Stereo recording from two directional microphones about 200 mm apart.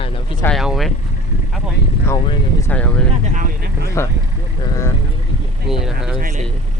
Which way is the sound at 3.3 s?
40° right (ahead or behind).